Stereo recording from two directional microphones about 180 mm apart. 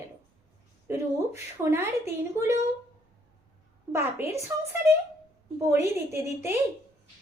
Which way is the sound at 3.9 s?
15° right (ahead or behind).